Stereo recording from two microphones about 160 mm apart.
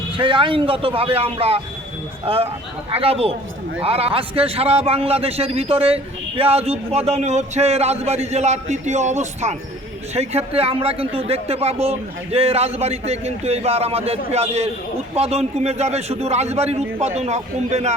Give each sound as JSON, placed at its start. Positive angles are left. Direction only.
{"t": 0.2, "sound": "a man's voice", "side_deg": -30}